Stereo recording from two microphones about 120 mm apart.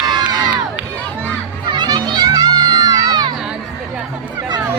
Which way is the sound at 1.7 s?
35° right (ahead or behind).